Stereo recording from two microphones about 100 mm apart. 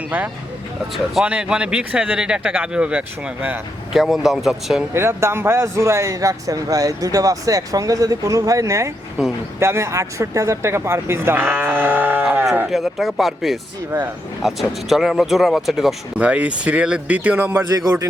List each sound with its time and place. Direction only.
1.2 s speech: 10° right (ahead or behind)
3.9 s speech: 5° right (ahead or behind)
4.9 s a man's voice: 25° right (ahead or behind)
12.6 s speech: centre (ahead or behind); by 17.6 s 20° right (ahead or behind)
17.7 s a man's voice: 35° right (ahead or behind)